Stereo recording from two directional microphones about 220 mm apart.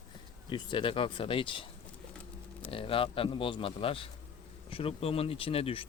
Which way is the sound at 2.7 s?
25° left (ahead or behind).